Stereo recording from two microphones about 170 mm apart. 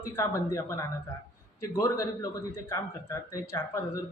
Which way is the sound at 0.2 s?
15° left (ahead or behind).